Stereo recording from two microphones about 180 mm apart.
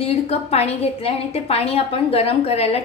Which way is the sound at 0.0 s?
35° left (ahead or behind).